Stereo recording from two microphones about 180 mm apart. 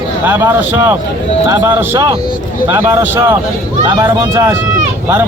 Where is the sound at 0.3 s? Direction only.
10° right (ahead or behind).